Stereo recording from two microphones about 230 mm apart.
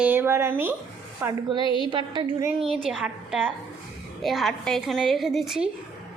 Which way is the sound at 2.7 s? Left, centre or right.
Centre.